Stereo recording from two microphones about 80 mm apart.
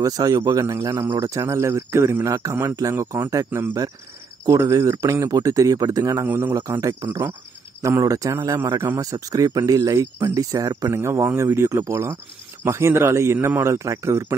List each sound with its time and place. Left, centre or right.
0.0 s speech: right
3.3 s speech: right
6.2 s a man's voice: right
6.8 s speech: right
10.9 s speech: right